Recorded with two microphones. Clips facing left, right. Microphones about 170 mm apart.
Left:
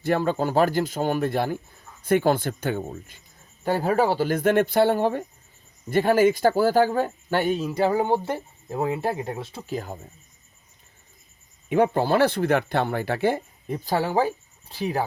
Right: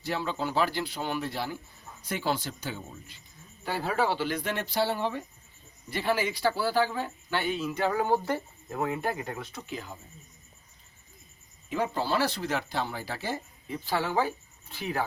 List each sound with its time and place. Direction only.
0.0 s speech: 50° left (ahead or behind); by 9.7 s 25° left (ahead or behind)
9.7 s speech: 45° left (ahead or behind)
11.7 s speech: 55° left (ahead or behind); by 15.0 s 35° left (ahead or behind)